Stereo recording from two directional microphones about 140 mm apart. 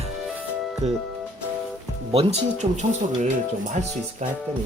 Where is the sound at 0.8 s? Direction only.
50° right (ahead or behind).